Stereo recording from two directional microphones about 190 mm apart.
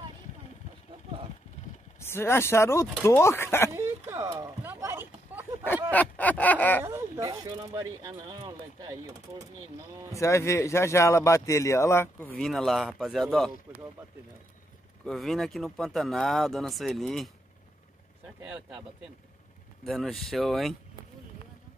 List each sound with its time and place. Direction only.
2.0 s speech: 15° left (ahead or behind)
3.7 s a sound: 15° right (ahead or behind)
5.9 s a sound: 10° left (ahead or behind)
6.8 s speech: 10° right (ahead or behind)
10.1 s speech: 15° left (ahead or behind)
15.0 s speech: centre (ahead or behind)
18.4 s speech: 10° right (ahead or behind)
19.8 s speech: centre (ahead or behind)